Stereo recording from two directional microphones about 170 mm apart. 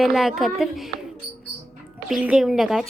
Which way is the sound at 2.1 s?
5° right (ahead or behind).